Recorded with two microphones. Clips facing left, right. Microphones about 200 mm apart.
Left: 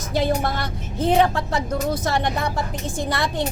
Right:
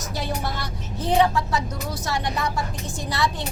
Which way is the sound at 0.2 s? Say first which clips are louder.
Left 8 dB; 55° left (ahead or behind).